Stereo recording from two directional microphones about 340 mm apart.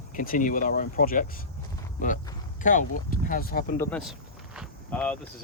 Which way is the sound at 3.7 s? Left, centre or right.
Centre.